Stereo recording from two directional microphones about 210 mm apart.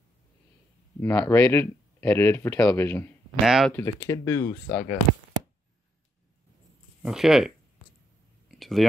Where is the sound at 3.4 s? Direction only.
Centre (ahead or behind).